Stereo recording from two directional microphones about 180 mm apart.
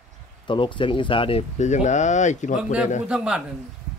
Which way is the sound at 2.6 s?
5° right (ahead or behind).